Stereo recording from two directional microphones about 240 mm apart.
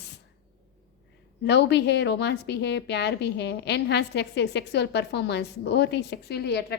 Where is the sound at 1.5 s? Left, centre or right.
Left.